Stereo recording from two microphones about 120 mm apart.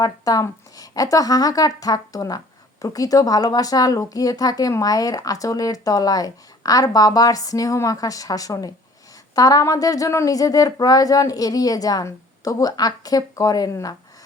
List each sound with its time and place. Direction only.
0.0 s a woman's voice: 30° left (ahead or behind)